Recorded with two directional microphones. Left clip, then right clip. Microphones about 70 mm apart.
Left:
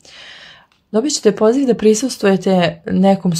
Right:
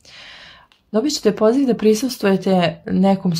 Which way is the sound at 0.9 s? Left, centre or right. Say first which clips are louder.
Left 3 dB; left.